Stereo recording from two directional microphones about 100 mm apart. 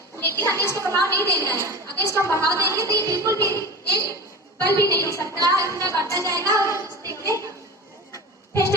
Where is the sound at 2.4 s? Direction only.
30° right (ahead or behind).